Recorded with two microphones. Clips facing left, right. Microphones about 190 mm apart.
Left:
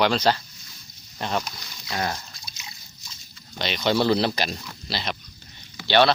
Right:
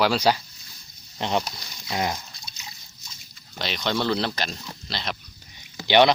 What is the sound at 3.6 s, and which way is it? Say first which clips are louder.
Speech: left 4 dB; centre (ahead or behind).